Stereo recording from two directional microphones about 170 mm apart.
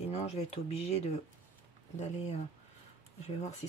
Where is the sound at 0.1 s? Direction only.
40° left (ahead or behind).